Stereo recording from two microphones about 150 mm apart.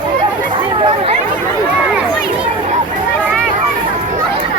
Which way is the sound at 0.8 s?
40° right (ahead or behind).